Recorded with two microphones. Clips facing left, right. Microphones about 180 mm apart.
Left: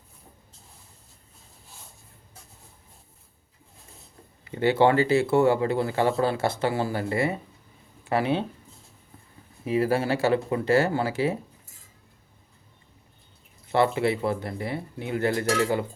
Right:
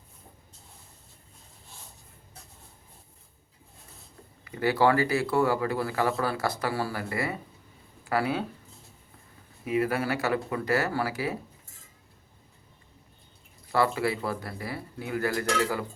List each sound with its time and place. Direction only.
4.4 s speech: 25° left (ahead or behind)
9.6 s speech: 30° left (ahead or behind)
13.7 s speech: 25° left (ahead or behind)